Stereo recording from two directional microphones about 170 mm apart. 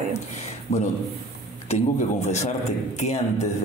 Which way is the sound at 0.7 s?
40° left (ahead or behind).